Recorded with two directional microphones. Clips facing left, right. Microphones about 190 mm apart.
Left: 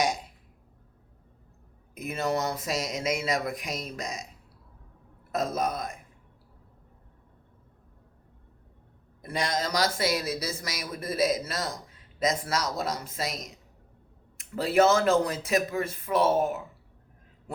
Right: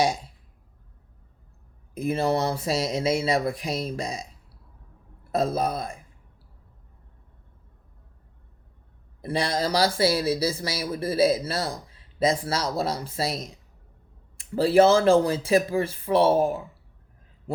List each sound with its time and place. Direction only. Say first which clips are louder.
2.0 s speech: right 5 dB; 30° right (ahead or behind)
5.3 s speech: right 4 dB; 30° right (ahead or behind)
9.2 s speech: right 4 dB; 30° right (ahead or behind)